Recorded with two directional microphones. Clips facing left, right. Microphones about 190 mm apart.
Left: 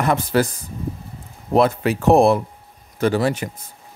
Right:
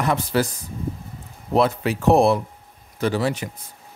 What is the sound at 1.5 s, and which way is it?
Speech, 50° left (ahead or behind).